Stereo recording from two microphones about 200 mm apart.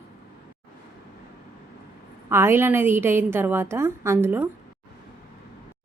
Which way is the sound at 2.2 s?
10° right (ahead or behind).